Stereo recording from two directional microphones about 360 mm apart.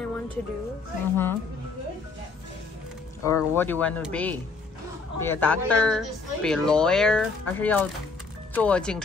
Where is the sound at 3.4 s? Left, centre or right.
Centre.